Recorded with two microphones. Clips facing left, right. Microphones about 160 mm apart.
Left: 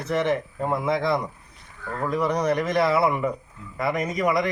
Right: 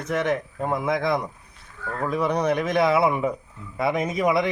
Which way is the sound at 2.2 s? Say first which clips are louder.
Even; 10° right (ahead or behind).